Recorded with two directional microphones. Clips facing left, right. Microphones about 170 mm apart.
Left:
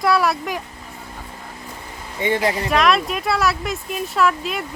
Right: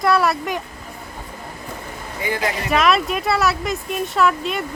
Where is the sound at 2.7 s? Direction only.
Centre (ahead or behind).